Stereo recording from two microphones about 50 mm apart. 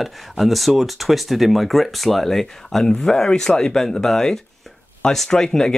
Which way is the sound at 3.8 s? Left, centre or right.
Centre.